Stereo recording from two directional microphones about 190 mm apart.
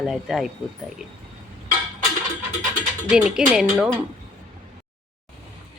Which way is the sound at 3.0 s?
5° right (ahead or behind).